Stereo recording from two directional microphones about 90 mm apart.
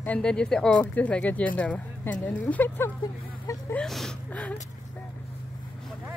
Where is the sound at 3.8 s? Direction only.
5° left (ahead or behind).